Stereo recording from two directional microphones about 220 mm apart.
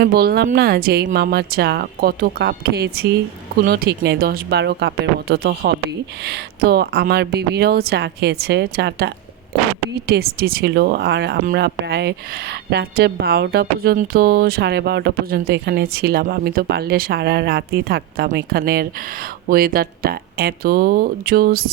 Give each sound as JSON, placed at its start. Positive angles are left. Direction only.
{"t": 0.0, "sound": "speech", "side_deg": -45}